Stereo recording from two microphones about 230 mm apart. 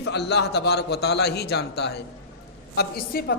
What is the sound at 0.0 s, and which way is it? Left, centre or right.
A man's voice, left.